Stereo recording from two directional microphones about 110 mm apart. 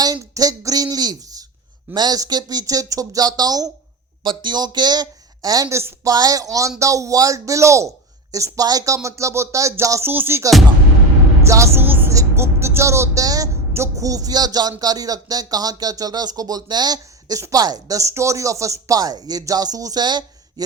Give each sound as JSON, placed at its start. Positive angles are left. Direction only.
{"t": 0.0, "sound": "a woman's voice", "side_deg": -35}